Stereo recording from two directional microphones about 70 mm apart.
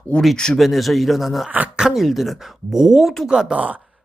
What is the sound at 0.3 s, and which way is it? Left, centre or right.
Speech, centre.